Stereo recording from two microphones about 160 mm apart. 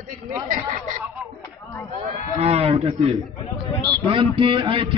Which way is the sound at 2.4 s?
40° right (ahead or behind).